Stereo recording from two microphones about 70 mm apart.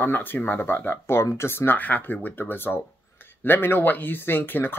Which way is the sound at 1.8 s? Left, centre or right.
Left.